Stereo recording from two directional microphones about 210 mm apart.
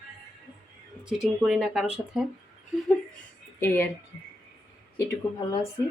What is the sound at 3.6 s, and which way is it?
Speech, 10° left (ahead or behind).